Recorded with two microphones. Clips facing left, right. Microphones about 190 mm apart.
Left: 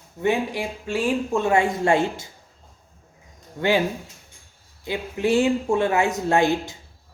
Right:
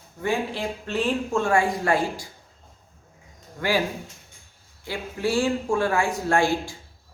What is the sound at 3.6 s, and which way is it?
Speech, 25° left (ahead or behind).